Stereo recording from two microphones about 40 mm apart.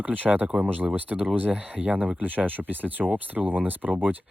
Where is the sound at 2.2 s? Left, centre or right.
Right.